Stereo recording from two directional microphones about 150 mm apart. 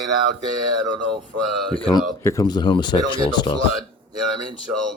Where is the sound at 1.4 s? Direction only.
5° left (ahead or behind).